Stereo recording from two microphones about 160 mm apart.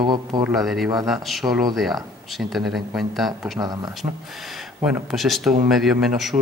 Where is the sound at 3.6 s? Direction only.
25° right (ahead or behind).